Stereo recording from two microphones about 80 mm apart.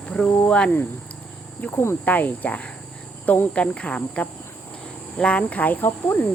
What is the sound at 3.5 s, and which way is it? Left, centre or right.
Speech, centre.